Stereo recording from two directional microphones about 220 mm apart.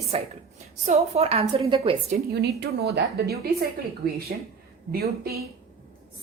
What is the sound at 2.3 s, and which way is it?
Speech, 50° right (ahead or behind).